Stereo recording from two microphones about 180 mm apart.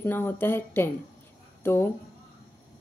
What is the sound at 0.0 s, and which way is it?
A woman's voice, 10° left (ahead or behind).